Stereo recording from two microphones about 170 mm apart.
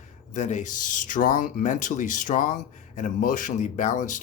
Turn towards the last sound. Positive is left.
turn(degrees=45)  # may be behind; listen again after turning